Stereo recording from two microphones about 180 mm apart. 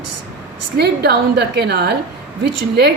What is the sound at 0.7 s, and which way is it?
A woman's voice, 65° right (ahead or behind).